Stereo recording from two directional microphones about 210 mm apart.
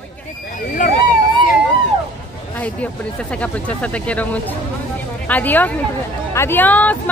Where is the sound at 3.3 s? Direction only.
5° left (ahead or behind).